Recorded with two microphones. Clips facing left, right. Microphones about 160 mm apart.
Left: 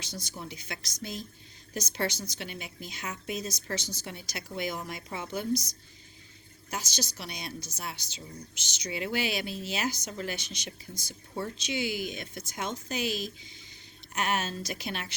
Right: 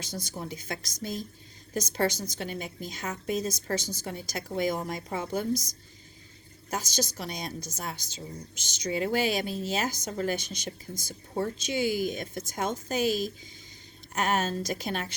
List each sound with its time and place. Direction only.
0.0 s speech: 50° right (ahead or behind)
6.7 s speech: 45° right (ahead or behind)